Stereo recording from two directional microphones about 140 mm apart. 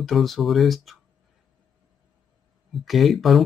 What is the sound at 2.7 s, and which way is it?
Speech, centre (ahead or behind).